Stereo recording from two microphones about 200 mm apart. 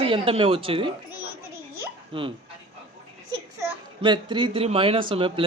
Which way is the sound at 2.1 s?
25° right (ahead or behind).